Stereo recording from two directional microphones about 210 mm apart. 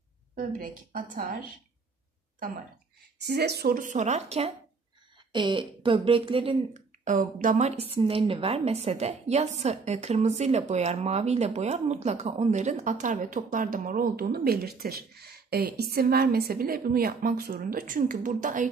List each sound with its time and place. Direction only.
0.4 s a woman's voice: 40° right (ahead or behind)
3.2 s speech: 50° right (ahead or behind)